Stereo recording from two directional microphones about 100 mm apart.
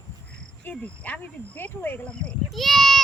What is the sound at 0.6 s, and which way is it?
Speech, 15° left (ahead or behind).